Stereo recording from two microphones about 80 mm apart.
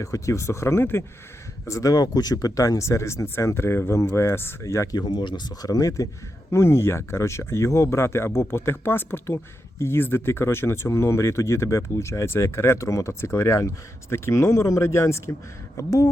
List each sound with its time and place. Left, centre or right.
0.0 s speech: left
1.6 s speech: left
4.9 s speech: left
6.5 s speech: left